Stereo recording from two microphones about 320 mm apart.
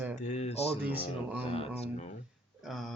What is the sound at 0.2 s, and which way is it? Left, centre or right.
Speech, left.